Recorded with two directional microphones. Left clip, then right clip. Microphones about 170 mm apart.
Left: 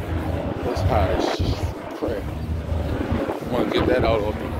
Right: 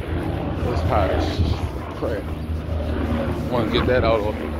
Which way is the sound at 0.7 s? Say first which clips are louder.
Right 1 dB; 25° left (ahead or behind).